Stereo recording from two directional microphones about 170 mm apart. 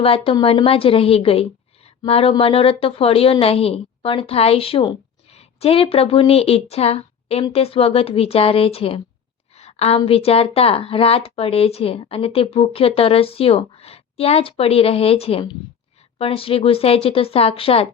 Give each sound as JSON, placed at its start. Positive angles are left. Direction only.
{"t": 0.0, "sound": "speech", "side_deg": 35}
{"t": 9.6, "sound": "a sound", "side_deg": 40}
{"t": 10.0, "sound": "speech", "side_deg": 35}